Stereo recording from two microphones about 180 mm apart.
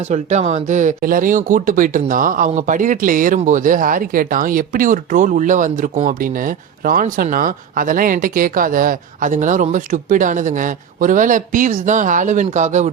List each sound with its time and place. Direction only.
0.0 s speech: 40° right (ahead or behind)